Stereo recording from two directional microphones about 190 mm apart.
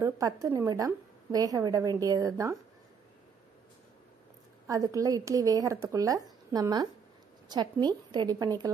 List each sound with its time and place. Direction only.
0.0 s a woman's voice: 15° right (ahead or behind)
4.6 s a woman's voice: 20° right (ahead or behind)